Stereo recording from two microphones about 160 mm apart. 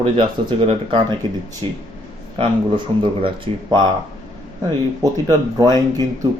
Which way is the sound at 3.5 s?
35° right (ahead or behind).